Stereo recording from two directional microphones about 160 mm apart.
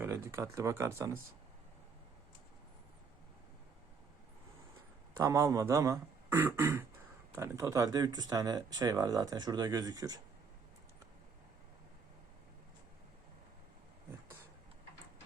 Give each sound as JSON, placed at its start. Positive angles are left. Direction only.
{"t": 0.0, "sound": "speech", "side_deg": -15}
{"t": 5.1, "sound": "speech", "side_deg": -20}